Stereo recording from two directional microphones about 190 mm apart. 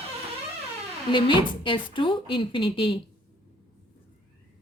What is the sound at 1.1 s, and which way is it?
A woman's voice, 25° left (ahead or behind).